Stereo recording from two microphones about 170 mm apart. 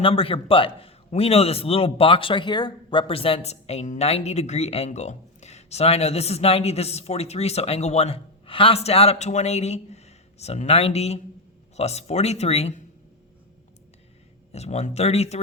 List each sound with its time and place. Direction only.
0.0 s a man's voice: 35° left (ahead or behind)
14.5 s a man's voice: 40° left (ahead or behind)